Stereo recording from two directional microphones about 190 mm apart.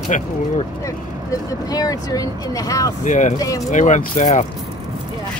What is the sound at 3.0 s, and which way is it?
Speech, 40° left (ahead or behind).